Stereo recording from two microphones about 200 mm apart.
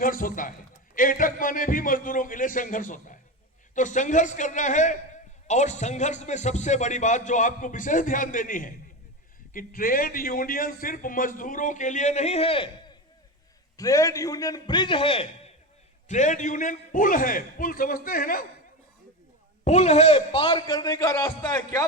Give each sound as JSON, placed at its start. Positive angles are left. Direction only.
{"t": 0.0, "sound": "a man's voice", "side_deg": 45}
{"t": 13.7, "sound": "a man's voice", "side_deg": 15}
{"t": 19.6, "sound": "a man's voice", "side_deg": 35}